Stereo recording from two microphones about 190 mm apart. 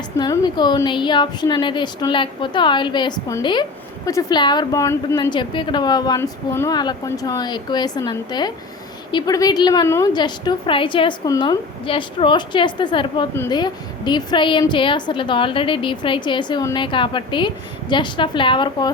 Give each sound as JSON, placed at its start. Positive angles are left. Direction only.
{"t": 0.2, "sound": "a woman's voice", "side_deg": 20}